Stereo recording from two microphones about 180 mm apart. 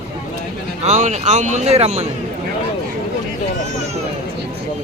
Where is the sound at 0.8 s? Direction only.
40° right (ahead or behind).